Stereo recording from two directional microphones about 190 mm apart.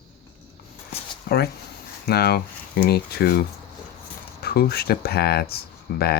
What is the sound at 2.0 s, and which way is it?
Speech, 55° left (ahead or behind).